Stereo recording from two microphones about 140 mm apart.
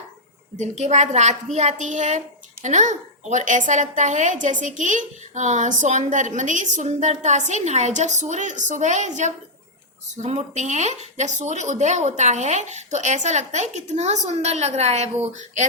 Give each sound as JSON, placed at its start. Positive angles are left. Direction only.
{"t": 0.5, "sound": "a woman's voice", "side_deg": -55}